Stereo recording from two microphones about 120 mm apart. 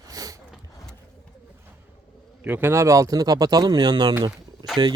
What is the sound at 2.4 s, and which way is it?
Speech, 15° right (ahead or behind).